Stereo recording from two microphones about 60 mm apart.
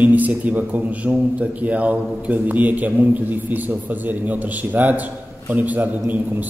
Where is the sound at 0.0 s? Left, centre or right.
Right.